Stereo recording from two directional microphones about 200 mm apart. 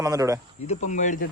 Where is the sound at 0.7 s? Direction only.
40° left (ahead or behind).